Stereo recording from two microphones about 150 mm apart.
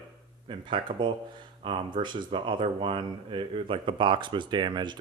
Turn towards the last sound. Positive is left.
turn(degrees=-30)  # may be behind; listen again after turning